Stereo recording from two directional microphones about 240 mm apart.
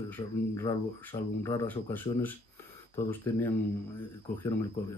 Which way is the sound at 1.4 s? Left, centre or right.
Centre.